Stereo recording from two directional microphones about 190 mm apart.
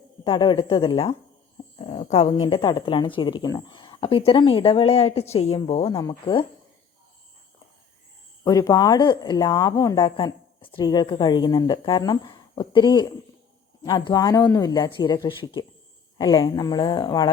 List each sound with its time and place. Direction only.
0.3 s speech: 25° left (ahead or behind)
6.0 s speech: 20° left (ahead or behind)
8.4 s speech: 20° left (ahead or behind)